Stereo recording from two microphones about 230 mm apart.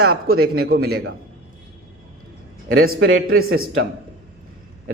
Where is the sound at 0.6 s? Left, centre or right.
Right.